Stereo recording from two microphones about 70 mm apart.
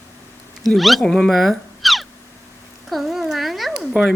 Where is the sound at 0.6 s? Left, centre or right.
Centre.